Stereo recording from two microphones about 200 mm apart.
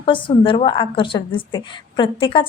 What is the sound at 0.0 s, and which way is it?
A woman's voice, 25° left (ahead or behind).